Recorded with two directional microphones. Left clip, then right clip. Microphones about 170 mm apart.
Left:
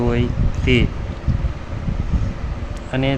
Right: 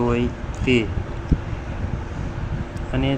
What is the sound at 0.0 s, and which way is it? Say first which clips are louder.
Speech: left 1 dB; 15° left (ahead or behind).